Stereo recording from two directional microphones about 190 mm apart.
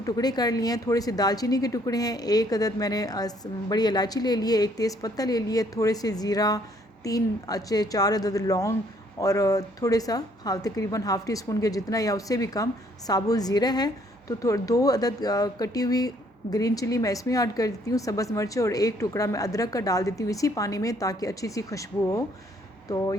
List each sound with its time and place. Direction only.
0.0 s a woman's voice: 20° left (ahead or behind)